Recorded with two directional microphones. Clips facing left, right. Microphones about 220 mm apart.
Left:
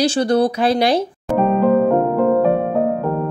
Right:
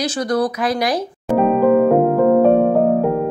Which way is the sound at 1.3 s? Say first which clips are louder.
Right 2 dB; centre (ahead or behind).